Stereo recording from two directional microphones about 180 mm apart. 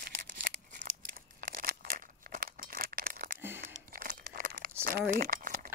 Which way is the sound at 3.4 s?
10° right (ahead or behind).